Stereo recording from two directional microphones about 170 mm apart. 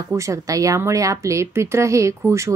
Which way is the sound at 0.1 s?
20° right (ahead or behind).